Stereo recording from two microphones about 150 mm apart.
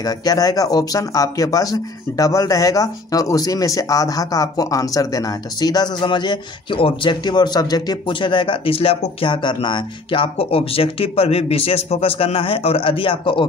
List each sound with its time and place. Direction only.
0.0 s speech: 25° left (ahead or behind)